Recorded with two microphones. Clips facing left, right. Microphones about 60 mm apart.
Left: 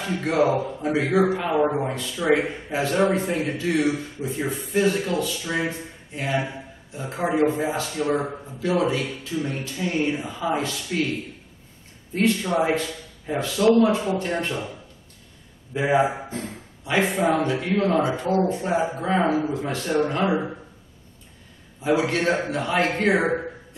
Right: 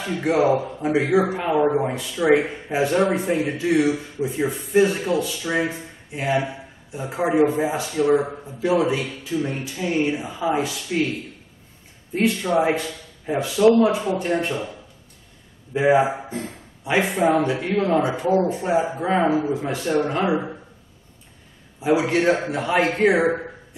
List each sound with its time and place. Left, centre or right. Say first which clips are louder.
0.0 s speech: right 3 dB; centre
0.8 s speech: right 1 dB; centre
1.8 s speech: right 4 dB; centre
3.0 s a man's voice: right 1 dB; centre; by 5.6 s right
5.7 s a man's voice: even; centre
12.1 s speech: even; centre
12.4 s a man's voice: right 2 dB; centre
15.7 s speech: right 3 dB; centre
17.3 s speech: right 2 dB; centre
21.7 s a man's voice: right 2 dB; centre
23.1 s a sound: right 2 dB; centre